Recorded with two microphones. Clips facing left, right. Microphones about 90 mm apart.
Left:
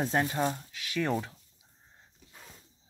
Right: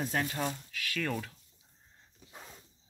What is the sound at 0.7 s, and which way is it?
Speech, 20° left (ahead or behind).